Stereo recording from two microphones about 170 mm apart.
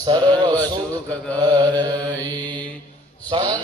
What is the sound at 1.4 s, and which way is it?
Mantra, 25° right (ahead or behind).